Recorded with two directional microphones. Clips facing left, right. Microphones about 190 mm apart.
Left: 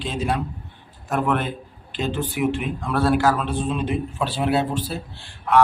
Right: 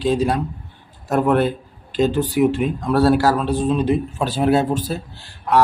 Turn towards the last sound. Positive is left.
turn(degrees=-40)  # may be behind; listen again after turning